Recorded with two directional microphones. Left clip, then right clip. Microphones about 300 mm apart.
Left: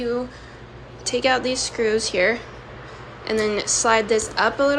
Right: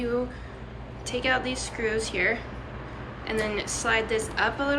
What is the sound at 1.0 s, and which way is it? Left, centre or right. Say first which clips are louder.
A woman's voice: left 6 dB; centre.